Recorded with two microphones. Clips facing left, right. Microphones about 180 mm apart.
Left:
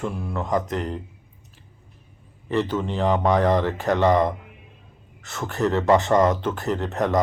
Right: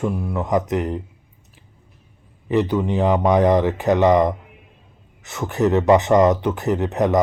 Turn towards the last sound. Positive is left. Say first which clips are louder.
# right 4 dB
turn(degrees=-20)  # may be behind; listen again after turning